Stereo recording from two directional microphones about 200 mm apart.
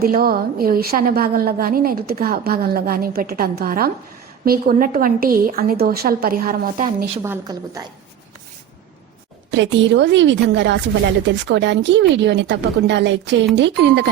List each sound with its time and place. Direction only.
0.0 s a woman's voice: 50° right (ahead or behind)
7.2 s a woman's voice: 15° right (ahead or behind)
9.5 s a woman's voice: 65° right (ahead or behind)